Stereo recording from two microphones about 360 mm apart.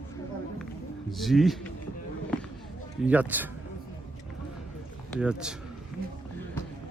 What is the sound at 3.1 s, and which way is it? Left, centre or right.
Speech, centre.